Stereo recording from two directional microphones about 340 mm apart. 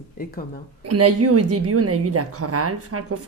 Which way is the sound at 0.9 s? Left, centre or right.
Right.